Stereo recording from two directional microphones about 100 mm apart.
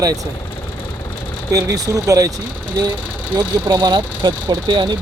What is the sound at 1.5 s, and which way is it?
Speech, 35° right (ahead or behind).